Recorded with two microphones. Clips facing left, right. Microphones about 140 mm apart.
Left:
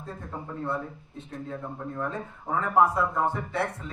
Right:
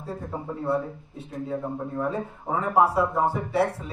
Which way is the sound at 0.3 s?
15° right (ahead or behind).